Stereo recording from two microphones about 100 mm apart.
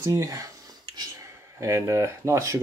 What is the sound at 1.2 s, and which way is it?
Speech, 30° right (ahead or behind).